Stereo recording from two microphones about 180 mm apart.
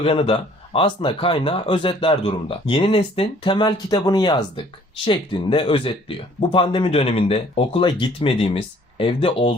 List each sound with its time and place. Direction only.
0.0 s speech: 30° left (ahead or behind)